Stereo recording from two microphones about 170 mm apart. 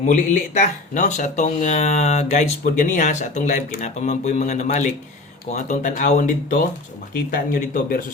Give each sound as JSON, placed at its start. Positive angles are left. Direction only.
{"t": 0.1, "sound": "speech", "side_deg": 50}